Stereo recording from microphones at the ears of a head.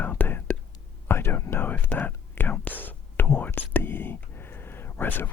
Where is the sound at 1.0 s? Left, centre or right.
Left.